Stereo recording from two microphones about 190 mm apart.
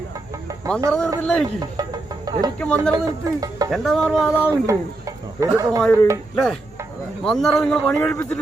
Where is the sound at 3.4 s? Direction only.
20° right (ahead or behind).